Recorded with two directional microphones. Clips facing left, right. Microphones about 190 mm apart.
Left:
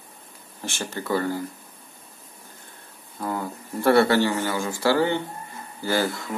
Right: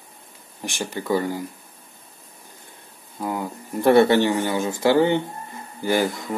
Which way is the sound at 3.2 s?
15° right (ahead or behind).